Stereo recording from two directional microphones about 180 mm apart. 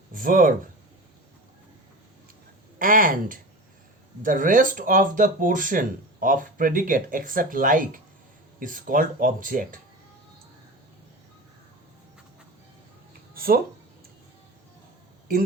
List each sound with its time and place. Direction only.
0.1 s speech: 50° right (ahead or behind)
2.7 s speech: 50° right (ahead or behind)
13.3 s a sound: 55° right (ahead or behind)